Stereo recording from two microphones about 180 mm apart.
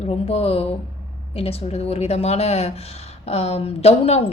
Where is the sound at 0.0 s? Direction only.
35° left (ahead or behind).